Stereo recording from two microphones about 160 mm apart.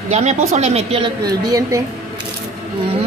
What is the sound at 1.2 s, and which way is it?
Speech, 20° right (ahead or behind).